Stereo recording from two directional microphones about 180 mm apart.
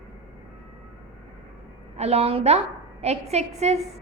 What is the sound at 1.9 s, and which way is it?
A woman's voice, 35° right (ahead or behind).